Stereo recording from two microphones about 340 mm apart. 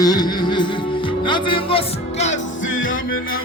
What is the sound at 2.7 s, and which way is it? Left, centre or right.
Music, left.